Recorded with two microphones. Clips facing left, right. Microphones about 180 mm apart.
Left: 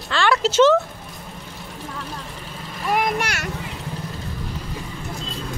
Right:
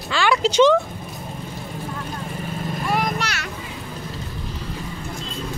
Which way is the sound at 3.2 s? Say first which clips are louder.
Left 1 dB; 50° left (ahead or behind).